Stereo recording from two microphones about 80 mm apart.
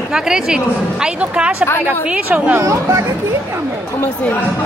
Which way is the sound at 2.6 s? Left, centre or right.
Right.